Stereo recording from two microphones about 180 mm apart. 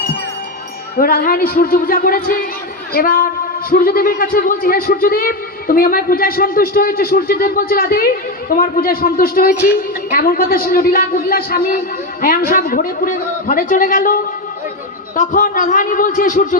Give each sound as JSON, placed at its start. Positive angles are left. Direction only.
{"t": 0.9, "sound": "a man's voice", "side_deg": 55}